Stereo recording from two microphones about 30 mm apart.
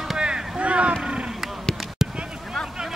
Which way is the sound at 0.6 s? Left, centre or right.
Right.